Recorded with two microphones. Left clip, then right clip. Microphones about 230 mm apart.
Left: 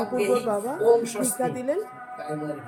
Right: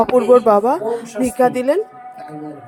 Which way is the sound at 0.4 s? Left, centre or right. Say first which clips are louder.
Right 8 dB; right.